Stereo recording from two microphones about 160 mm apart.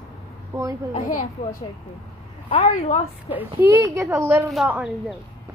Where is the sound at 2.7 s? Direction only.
50° left (ahead or behind).